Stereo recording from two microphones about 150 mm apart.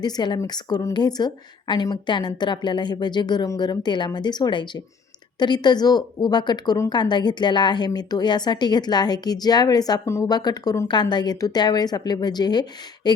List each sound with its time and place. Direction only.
0.0 s a woman's voice: 30° left (ahead or behind)